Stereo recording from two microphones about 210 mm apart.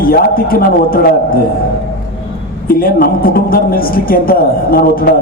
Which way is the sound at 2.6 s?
45° left (ahead or behind).